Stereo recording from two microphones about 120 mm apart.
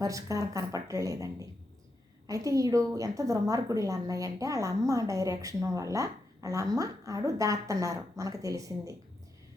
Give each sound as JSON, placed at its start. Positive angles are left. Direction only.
{"t": 0.0, "sound": "a woman's voice", "side_deg": -25}